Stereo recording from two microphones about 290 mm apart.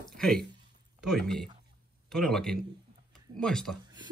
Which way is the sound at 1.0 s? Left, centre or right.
Centre.